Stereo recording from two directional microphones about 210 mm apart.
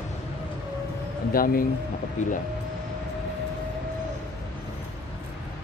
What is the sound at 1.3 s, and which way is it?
A man's voice, 45° left (ahead or behind).